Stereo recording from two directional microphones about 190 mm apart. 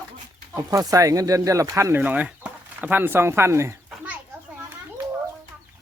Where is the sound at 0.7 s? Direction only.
15° right (ahead or behind).